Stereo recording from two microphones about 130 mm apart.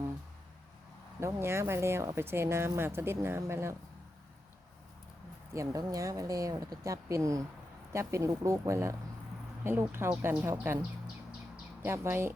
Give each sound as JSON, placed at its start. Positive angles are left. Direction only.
{"t": 1.2, "sound": "speech", "side_deg": -20}
{"t": 5.5, "sound": "speech", "side_deg": -25}
{"t": 11.8, "sound": "speech", "side_deg": -15}